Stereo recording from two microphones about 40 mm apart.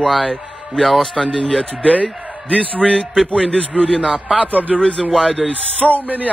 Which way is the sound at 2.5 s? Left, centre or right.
Left.